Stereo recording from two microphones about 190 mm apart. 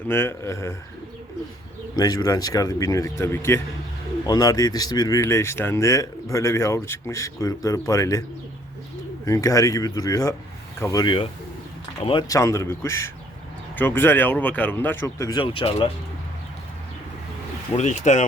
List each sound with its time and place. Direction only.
0.1 s speech: 15° left (ahead or behind)
2.0 s speech: 20° left (ahead or behind)
9.2 s speech: 15° left (ahead or behind)
17.7 s speech: 40° left (ahead or behind)